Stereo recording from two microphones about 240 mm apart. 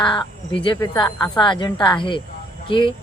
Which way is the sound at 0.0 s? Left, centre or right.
Centre.